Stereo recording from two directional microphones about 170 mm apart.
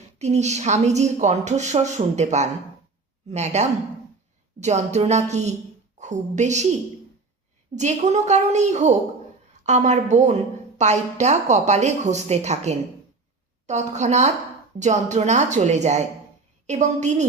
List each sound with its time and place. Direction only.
0.2 s a woman's voice: 40° right (ahead or behind)
7.8 s a woman's voice: 45° right (ahead or behind)